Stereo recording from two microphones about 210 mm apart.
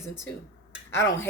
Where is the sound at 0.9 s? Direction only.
10° left (ahead or behind).